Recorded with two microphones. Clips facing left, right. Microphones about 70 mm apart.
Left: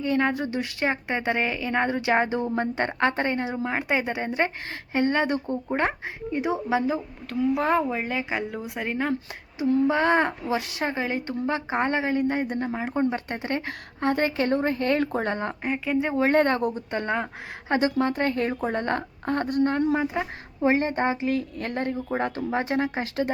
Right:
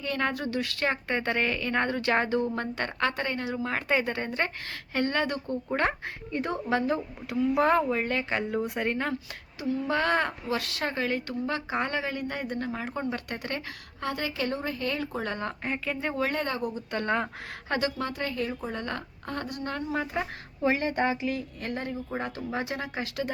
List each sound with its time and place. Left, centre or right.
0.0 s speech: centre
6.3 s a woman's voice: centre
9.8 s speech: centre
13.7 s a woman's voice: left
15.2 s speech: left
15.6 s a woman's voice: centre
16.1 s speech: left
17.7 s speech: left
18.0 s a woman's voice: left
19.9 s a woman's voice: centre
20.6 s a woman's voice: left
21.3 s speech: left
22.4 s a woman's voice: left